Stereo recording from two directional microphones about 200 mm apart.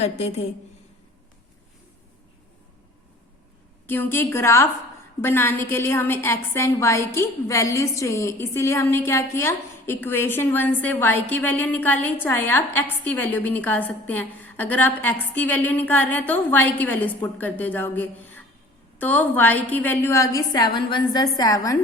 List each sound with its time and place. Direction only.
0.0 s a woman's voice: 35° left (ahead or behind)
3.8 s a woman's voice: 10° left (ahead or behind)